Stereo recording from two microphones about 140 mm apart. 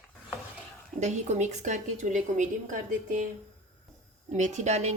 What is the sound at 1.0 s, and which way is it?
A woman's voice, 55° right (ahead or behind).